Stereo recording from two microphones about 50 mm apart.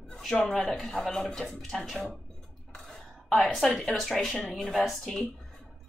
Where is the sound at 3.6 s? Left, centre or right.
Centre.